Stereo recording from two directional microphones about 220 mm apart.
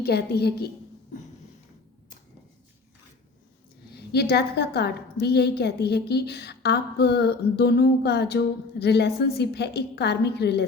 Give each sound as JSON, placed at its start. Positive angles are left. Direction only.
{"t": 0.0, "sound": "a woman's voice", "side_deg": 45}
{"t": 3.9, "sound": "a woman's voice", "side_deg": 45}